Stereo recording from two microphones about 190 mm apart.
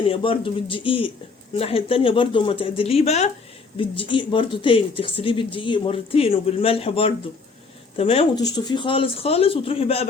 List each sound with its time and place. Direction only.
0.1 s speech: 30° left (ahead or behind)